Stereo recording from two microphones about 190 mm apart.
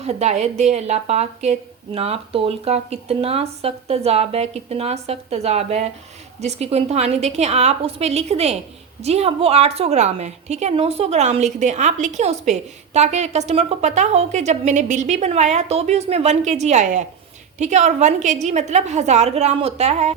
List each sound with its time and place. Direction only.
0.0 s a woman's voice: 35° right (ahead or behind)